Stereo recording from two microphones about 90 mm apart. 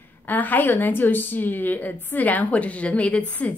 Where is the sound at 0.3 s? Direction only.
20° left (ahead or behind).